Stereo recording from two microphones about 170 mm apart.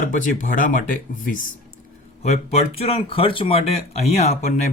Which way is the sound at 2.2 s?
40° left (ahead or behind).